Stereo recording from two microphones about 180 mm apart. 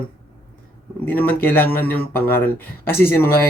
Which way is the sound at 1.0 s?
10° left (ahead or behind).